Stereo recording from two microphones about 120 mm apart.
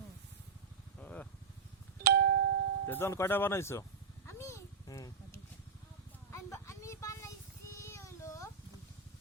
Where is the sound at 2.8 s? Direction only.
20° left (ahead or behind).